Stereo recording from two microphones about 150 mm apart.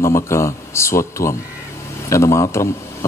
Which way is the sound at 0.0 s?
15° left (ahead or behind).